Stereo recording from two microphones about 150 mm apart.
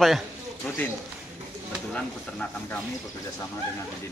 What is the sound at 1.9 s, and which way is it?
Speech, 10° left (ahead or behind).